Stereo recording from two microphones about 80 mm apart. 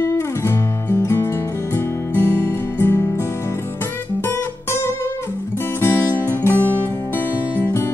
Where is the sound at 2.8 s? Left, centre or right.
Left.